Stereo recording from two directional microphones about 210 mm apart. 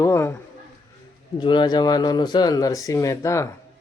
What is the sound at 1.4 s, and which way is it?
Speech, 20° left (ahead or behind).